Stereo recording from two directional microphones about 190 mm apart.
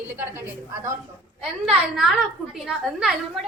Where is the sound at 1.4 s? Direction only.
Centre (ahead or behind).